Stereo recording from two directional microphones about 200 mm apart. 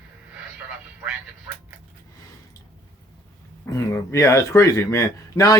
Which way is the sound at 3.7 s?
15° left (ahead or behind).